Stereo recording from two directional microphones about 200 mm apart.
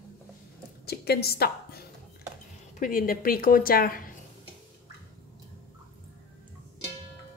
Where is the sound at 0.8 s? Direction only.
50° left (ahead or behind).